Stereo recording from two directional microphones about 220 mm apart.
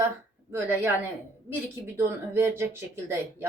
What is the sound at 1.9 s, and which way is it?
A woman's voice, 10° right (ahead or behind).